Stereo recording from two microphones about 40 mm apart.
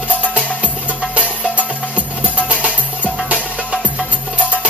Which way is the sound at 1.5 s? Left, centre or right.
Right.